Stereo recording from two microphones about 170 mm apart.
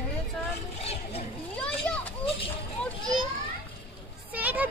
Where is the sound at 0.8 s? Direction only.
35° left (ahead or behind).